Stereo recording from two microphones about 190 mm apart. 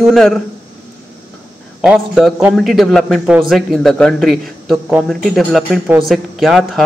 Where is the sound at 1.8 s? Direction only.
Centre (ahead or behind).